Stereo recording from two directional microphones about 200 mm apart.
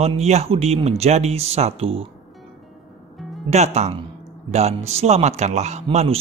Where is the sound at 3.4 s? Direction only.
35° right (ahead or behind).